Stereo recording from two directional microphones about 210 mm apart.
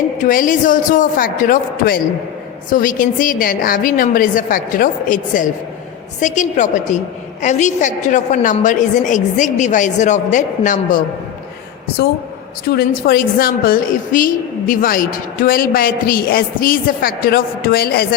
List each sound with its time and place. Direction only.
0.3 s a woman's voice: 40° left (ahead or behind)
12.7 s a woman's voice: 45° left (ahead or behind)